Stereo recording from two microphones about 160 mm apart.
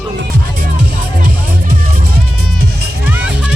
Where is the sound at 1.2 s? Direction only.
70° right (ahead or behind).